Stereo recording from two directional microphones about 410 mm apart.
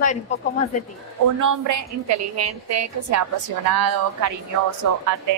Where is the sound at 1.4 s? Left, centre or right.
Right.